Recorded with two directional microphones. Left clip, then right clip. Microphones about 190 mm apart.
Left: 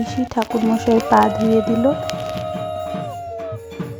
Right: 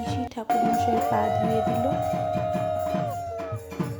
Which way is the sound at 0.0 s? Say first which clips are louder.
Left 8 dB; 25° left (ahead or behind).